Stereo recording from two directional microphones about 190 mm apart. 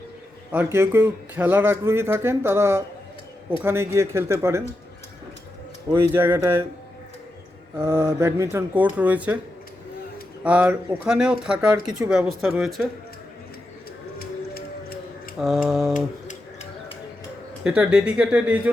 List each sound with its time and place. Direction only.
0.5 s speech: 10° right (ahead or behind)
5.9 s speech: 10° right (ahead or behind)
7.8 s speech: 15° right (ahead or behind)
10.4 s speech: 5° right (ahead or behind)
14.2 s music: 50° left (ahead or behind)
15.4 s speech: centre (ahead or behind)
15.9 s a sound: 40° left (ahead or behind)
17.6 s speech: 5° right (ahead or behind)